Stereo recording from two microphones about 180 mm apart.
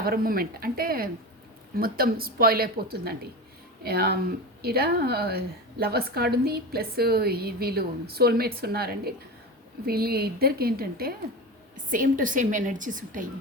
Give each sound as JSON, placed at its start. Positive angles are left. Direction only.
{"t": 0.0, "sound": "a woman's voice", "side_deg": -55}